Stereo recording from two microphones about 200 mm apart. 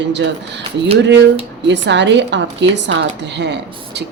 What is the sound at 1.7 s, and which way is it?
Speech, 60° right (ahead or behind).